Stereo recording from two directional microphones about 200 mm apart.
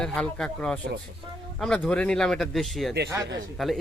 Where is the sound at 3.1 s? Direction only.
20° right (ahead or behind).